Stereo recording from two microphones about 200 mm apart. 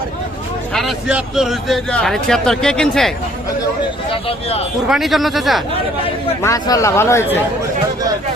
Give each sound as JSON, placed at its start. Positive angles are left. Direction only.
{"t": 0.7, "sound": "speech", "side_deg": 0}
{"t": 4.1, "sound": "speech", "side_deg": 30}
{"t": 4.9, "sound": "speech", "side_deg": 0}
{"t": 6.4, "sound": "speech", "side_deg": 15}